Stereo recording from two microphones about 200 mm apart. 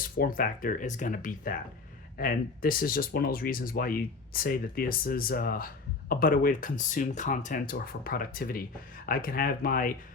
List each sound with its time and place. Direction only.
0.2 s speech: 45° left (ahead or behind)